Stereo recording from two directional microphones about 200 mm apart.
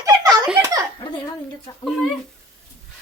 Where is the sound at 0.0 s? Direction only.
15° right (ahead or behind).